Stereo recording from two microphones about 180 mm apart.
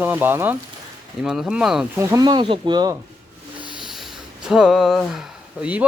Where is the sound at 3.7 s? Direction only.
Centre (ahead or behind).